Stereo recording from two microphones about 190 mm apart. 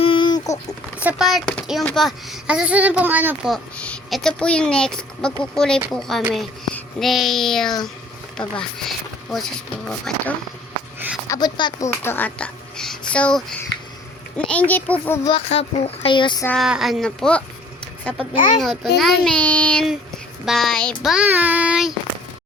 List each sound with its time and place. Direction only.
0.0 s a sound: 25° left (ahead or behind)
0.9 s a child's voice: 5° right (ahead or behind)
11.3 s a child's voice: 20° left (ahead or behind)
15.3 s speech: 30° left (ahead or behind)
16.5 s a child's voice: centre (ahead or behind)
18.3 s a child's voice: 40° left (ahead or behind)
18.6 s a child's voice: centre (ahead or behind)